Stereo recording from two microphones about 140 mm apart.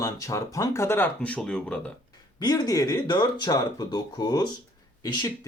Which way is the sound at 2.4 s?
30° left (ahead or behind).